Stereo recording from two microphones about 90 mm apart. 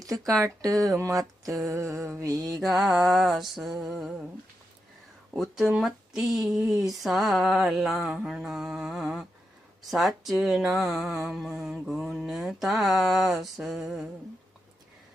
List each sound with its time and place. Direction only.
0.0 s speech: 40° right (ahead or behind)
1.6 s a sound: 30° right (ahead or behind)
2.2 s speech: 40° right (ahead or behind)
2.6 s speech: centre (ahead or behind)
5.3 s speech: centre (ahead or behind)